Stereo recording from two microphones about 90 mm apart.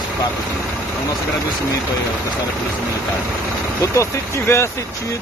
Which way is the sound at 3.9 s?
30° left (ahead or behind).